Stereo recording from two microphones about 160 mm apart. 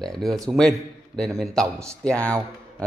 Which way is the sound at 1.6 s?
20° right (ahead or behind).